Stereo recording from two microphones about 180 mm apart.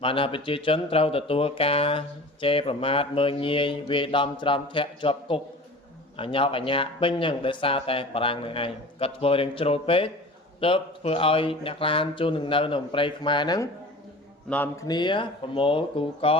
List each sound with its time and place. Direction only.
0.0 s speech: 30° left (ahead or behind)
14.5 s speech: 10° left (ahead or behind)
14.8 s speech: 25° left (ahead or behind)